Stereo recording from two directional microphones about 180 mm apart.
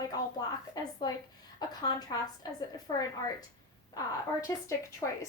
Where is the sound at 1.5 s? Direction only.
20° left (ahead or behind).